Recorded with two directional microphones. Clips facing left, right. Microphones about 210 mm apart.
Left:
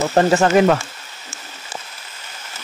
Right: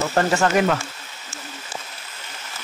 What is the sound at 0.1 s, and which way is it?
Speech, 20° left (ahead or behind).